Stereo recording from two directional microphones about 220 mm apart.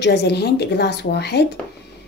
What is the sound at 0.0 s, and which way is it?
A woman's voice, 50° left (ahead or behind).